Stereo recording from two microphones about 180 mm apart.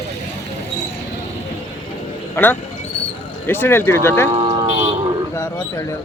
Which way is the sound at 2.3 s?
10° left (ahead or behind).